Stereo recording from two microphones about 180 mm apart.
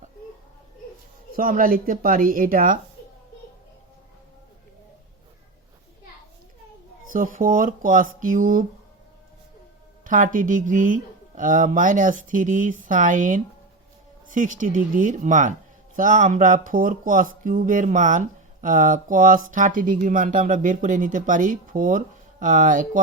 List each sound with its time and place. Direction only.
1.4 s speech: 50° right (ahead or behind)
7.1 s speech: 50° right (ahead or behind)
10.1 s speech: 45° right (ahead or behind)